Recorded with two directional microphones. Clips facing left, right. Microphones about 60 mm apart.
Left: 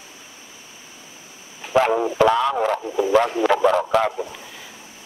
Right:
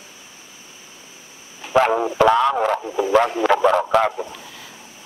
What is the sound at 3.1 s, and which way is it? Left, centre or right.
A man's voice, right.